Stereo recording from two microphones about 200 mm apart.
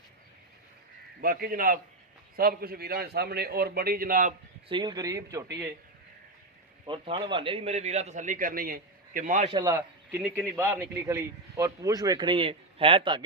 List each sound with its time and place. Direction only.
1.2 s a man's voice: 45° right (ahead or behind)
4.7 s a man's voice: 20° right (ahead or behind)
6.8 s a man's voice: 25° right (ahead or behind)
9.5 s a man's voice: 20° right (ahead or behind)